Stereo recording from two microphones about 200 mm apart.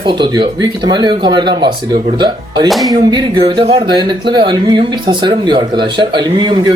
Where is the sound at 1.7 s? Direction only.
45° right (ahead or behind).